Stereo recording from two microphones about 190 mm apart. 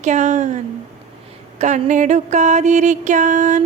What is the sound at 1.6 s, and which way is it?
Speech, 40° right (ahead or behind).